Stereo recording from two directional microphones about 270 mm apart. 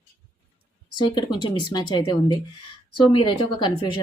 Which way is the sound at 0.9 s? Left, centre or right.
Centre.